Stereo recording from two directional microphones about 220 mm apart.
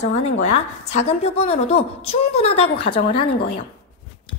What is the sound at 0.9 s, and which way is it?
A woman's voice, 30° left (ahead or behind).